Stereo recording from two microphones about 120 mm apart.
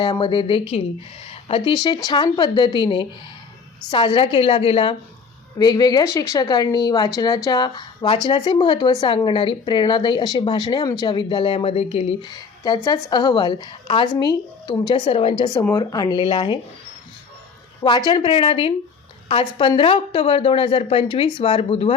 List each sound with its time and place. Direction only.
0.0 s speech: 40° left (ahead or behind)
5.5 s speech: 35° left (ahead or behind); by 12.1 s 55° left (ahead or behind)
12.3 s speech: 35° left (ahead or behind); by 15.4 s 50° left (ahead or behind)
15.7 s speech: 35° left (ahead or behind)
17.8 s speech: 40° left (ahead or behind)